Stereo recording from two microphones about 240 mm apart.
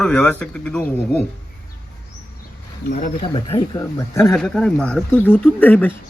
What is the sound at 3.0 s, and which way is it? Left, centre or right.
Speech, left.